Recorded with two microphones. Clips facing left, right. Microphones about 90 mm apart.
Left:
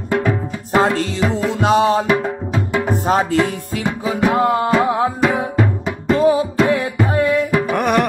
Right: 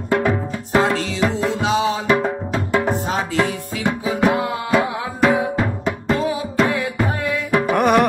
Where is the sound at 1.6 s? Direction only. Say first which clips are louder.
Left 7 dB; 50° left (ahead or behind).